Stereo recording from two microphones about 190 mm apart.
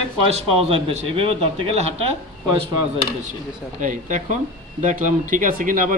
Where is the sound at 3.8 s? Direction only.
40° right (ahead or behind).